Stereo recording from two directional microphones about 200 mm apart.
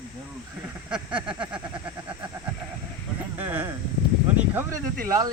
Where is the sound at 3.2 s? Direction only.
10° right (ahead or behind).